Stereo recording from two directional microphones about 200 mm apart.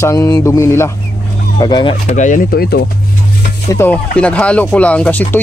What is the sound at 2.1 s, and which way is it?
Speech, 40° left (ahead or behind).